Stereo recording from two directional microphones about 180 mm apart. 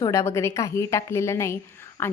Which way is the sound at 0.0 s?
15° left (ahead or behind).